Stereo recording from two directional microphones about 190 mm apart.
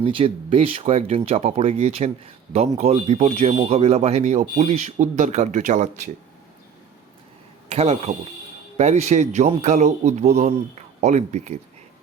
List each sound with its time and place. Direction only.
0.0 s speech: 30° right (ahead or behind)
7.7 s speech: 35° right (ahead or behind)